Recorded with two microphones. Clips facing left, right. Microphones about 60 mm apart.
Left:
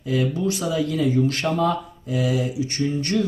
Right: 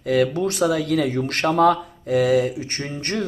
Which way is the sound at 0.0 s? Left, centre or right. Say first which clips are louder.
Right 3 dB; right.